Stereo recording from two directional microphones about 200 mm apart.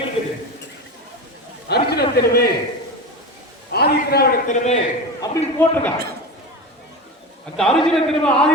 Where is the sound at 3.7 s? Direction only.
50° left (ahead or behind).